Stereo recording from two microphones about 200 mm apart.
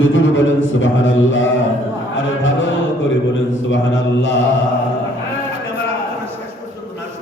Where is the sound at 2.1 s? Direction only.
70° left (ahead or behind).